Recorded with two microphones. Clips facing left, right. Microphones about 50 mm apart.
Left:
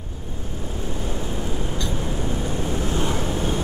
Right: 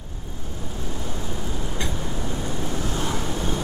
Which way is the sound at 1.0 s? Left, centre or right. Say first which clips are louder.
Left 4 dB; centre.